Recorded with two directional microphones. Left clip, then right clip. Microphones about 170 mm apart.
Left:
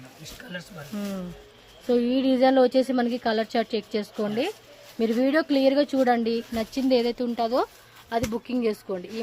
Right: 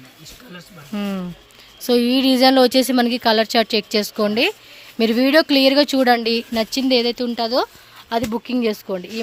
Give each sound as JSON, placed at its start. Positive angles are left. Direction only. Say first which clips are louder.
{"t": 0.9, "sound": "speech", "louder": "right 8 dB", "side_deg": -60}
{"t": 6.7, "sound": "speech", "louder": "right 3 dB", "side_deg": -35}
{"t": 8.1, "sound": "speech", "louder": "right 6 dB", "side_deg": -55}